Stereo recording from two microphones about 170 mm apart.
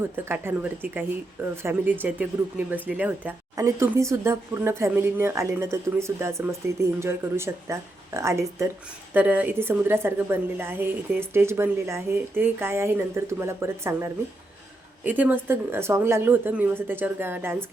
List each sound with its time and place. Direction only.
0.0 s speech: 10° right (ahead or behind)